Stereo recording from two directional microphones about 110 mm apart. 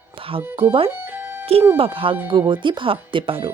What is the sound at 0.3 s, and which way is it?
Speech, 55° right (ahead or behind).